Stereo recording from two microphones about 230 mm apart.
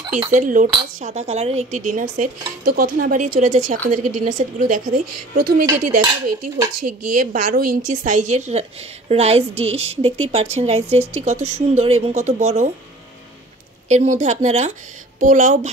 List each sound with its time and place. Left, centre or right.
0.3 s dishes: right
9.1 s speech: right
13.8 s speech: right
15.1 s dishes: right